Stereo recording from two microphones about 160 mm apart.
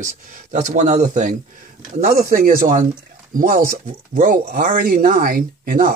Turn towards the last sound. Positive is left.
turn(degrees=-65)  # may be behind; listen again after turning